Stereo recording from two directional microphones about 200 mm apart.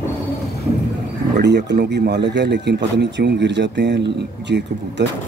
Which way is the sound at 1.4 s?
60° right (ahead or behind).